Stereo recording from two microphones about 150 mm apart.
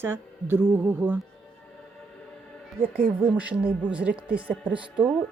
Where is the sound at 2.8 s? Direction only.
90° right.